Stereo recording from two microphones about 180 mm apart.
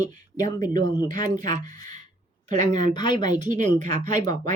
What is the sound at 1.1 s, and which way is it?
Speech, 45° right (ahead or behind).